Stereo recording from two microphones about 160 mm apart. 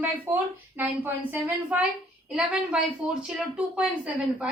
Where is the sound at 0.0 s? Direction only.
10° right (ahead or behind).